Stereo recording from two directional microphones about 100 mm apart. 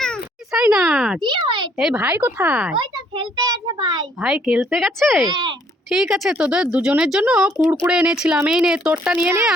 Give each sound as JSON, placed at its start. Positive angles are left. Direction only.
{"t": 0.7, "sound": "speech", "side_deg": -5}
{"t": 1.2, "sound": "a child's voice", "side_deg": -50}
{"t": 1.8, "sound": "speech", "side_deg": -5}
{"t": 2.7, "sound": "a child's voice", "side_deg": -45}
{"t": 4.2, "sound": "speech", "side_deg": -5}
{"t": 5.3, "sound": "a child's voice", "side_deg": -45}
{"t": 5.9, "sound": "speech", "side_deg": -5}